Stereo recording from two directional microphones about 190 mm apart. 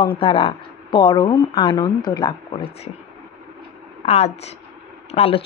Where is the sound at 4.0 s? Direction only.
35° left (ahead or behind).